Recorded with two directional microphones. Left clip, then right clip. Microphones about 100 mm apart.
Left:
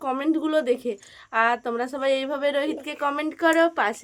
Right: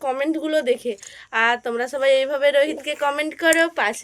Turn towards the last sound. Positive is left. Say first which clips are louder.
# right 2 dB
turn(degrees=45)  # may be behind; listen again after turning